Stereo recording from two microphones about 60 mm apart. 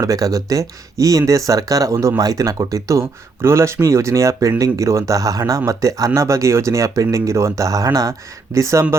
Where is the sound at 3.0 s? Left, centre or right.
Right.